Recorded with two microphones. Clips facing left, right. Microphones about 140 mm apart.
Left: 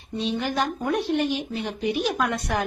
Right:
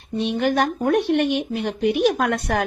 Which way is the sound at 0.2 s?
60° right (ahead or behind).